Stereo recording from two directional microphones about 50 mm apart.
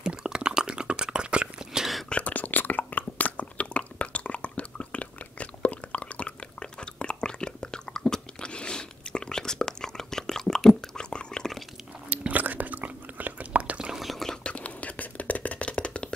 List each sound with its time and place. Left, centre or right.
0.0 s a sound: centre
2.0 s chewing: left
12.1 s whispering: right
13.9 s whispering: centre
14.4 s whispering: left